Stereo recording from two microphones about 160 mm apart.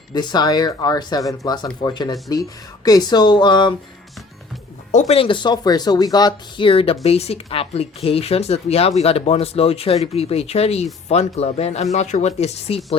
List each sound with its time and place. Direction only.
0.1 s speech: 25° left (ahead or behind)
4.9 s speech: 45° left (ahead or behind)